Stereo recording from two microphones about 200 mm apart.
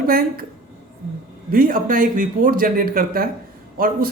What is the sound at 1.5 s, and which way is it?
Speech, 45° right (ahead or behind).